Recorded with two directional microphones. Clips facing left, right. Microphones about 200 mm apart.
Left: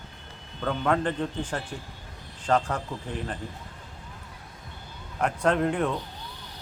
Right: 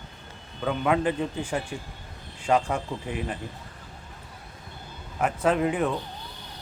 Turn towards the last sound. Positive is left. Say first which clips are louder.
# right 1 dB
turn(degrees=-5)  # may be behind; listen again after turning